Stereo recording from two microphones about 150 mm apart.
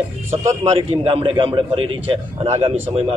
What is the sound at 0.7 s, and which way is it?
A man's voice, 40° right (ahead or behind).